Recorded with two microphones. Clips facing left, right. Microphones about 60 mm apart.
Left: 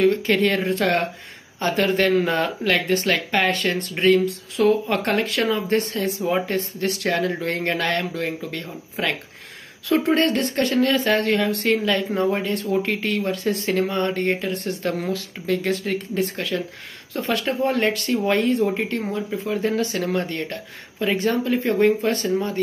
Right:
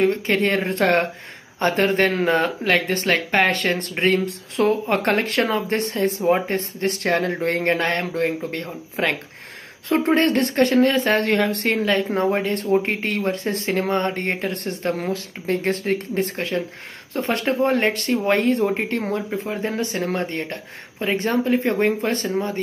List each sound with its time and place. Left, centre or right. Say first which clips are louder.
0.0 s speech: left 1 dB; right
14.7 s speech: right 1 dB; right
19.4 s speech: left 2 dB; right